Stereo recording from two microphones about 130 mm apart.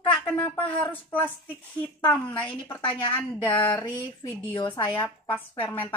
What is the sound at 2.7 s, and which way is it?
Speech, 40° left (ahead or behind).